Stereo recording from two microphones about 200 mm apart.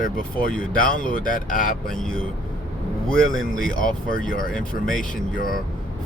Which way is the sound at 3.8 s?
45° left (ahead or behind).